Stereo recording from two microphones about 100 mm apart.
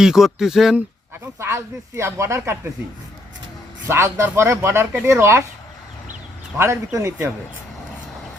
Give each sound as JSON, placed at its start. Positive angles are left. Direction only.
{"t": 0.0, "sound": "speech", "side_deg": -5}
{"t": 1.4, "sound": "speech", "side_deg": -25}
{"t": 3.8, "sound": "speech", "side_deg": -25}
{"t": 6.6, "sound": "speech", "side_deg": -30}